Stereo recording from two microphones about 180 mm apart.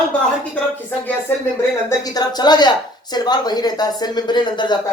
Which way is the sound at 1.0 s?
10° left (ahead or behind).